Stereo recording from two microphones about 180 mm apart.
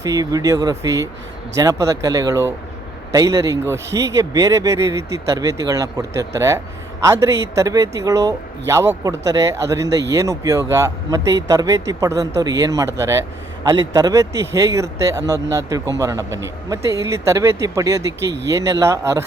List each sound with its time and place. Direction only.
0.0 s a man's voice: 20° right (ahead or behind)